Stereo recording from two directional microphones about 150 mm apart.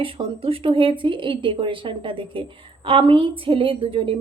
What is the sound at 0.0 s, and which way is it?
Speech, 35° right (ahead or behind).